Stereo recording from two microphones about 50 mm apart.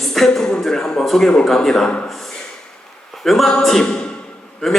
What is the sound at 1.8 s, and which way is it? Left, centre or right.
Speech, left.